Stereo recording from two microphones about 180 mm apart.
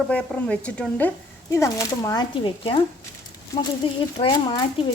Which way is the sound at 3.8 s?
30° left (ahead or behind).